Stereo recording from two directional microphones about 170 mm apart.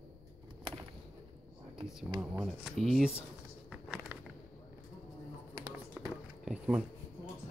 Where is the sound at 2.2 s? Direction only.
Centre (ahead or behind).